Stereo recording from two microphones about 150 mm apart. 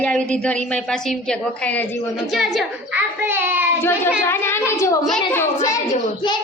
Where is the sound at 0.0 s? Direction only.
5° left (ahead or behind).